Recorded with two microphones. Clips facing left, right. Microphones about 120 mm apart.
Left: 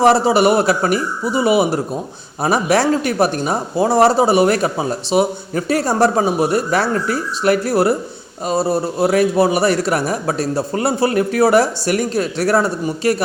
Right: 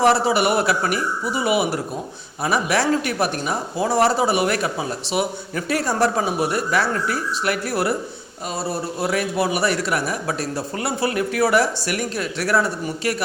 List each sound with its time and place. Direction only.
0.0 s speech: 35° left (ahead or behind)